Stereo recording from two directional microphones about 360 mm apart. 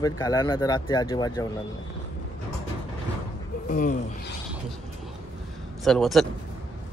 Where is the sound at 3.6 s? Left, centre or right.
Left.